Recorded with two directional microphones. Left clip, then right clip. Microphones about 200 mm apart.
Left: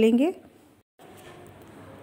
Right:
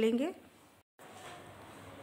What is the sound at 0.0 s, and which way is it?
Speech, 25° left (ahead or behind).